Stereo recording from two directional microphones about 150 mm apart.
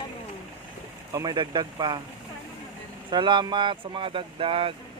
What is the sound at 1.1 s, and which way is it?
Speech, 30° right (ahead or behind).